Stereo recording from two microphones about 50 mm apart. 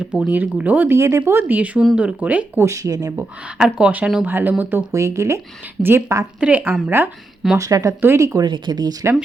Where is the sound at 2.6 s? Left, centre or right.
Right.